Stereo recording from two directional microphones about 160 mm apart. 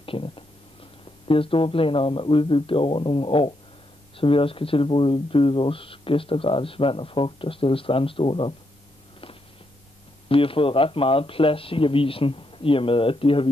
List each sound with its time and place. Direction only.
0.0 s a sound: 35° left (ahead or behind)
1.2 s speech: 35° left (ahead or behind)
10.2 s speech: 35° left (ahead or behind)